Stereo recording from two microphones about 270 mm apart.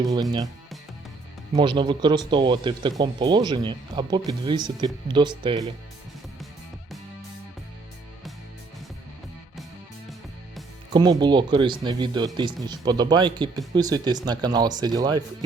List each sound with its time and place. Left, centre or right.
0.0 s speech: centre
1.5 s speech: centre
10.9 s speech: centre